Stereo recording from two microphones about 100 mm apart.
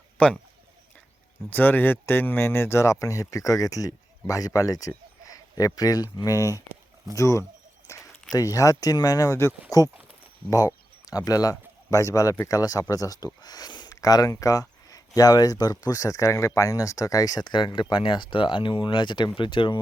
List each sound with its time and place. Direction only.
0.2 s speech: 15° left (ahead or behind)
1.5 s speech: 20° left (ahead or behind)
7.9 s a sound: 30° left (ahead or behind)
8.3 s speech: 35° left (ahead or behind)
10.5 s a sound: 35° left (ahead or behind)
11.3 s speech: 35° left (ahead or behind); by 19.8 s 55° left (ahead or behind)